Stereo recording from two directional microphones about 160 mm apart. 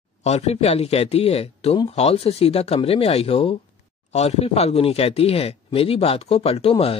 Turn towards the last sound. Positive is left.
turn(degrees=35)  # may be behind; listen again after turning